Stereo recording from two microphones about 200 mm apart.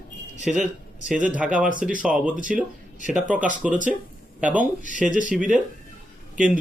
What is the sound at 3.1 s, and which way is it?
A man's voice, 5° right (ahead or behind).